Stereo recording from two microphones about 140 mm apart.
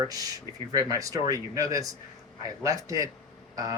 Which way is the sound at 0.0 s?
25° right (ahead or behind).